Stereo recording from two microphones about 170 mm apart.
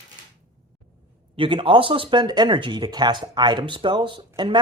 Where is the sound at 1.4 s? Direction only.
30° right (ahead or behind).